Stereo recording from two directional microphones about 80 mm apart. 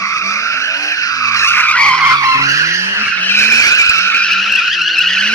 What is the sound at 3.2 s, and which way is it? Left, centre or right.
Vehicle, left.